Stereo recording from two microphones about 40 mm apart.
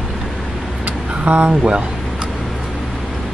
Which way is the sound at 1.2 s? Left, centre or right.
Right.